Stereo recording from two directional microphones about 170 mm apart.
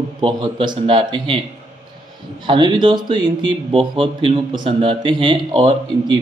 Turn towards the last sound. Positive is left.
turn(degrees=-30)  # may be behind; listen again after turning